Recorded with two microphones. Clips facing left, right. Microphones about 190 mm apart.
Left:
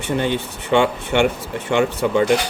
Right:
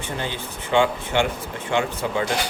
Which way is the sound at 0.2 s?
65° left (ahead or behind).